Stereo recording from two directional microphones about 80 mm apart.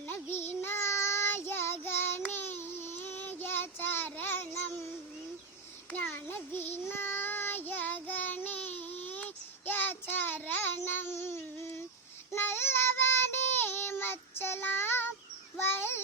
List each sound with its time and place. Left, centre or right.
0.0 s child singing: left
6.0 s child singing: left
15.6 s a sound: left